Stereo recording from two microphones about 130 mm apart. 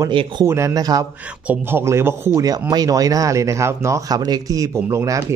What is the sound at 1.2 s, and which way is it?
Speech, 15° right (ahead or behind).